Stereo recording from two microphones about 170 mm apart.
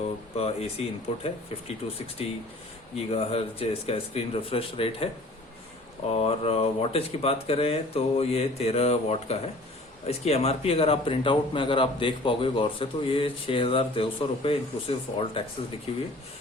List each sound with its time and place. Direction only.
0.3 s speech: 35° left (ahead or behind)
6.1 s speech: 35° left (ahead or behind)